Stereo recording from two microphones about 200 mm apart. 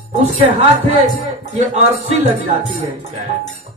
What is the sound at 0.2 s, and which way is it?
Speech, 35° right (ahead or behind).